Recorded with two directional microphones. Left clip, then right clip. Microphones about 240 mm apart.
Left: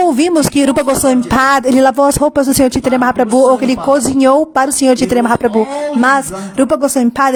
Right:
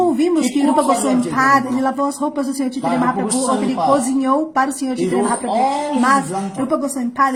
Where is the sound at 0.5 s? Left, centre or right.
Left.